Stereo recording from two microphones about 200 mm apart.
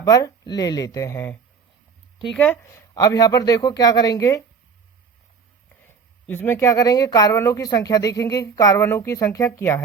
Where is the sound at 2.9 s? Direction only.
20° left (ahead or behind).